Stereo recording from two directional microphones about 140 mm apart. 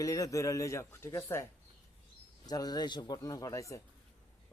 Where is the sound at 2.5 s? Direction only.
30° left (ahead or behind).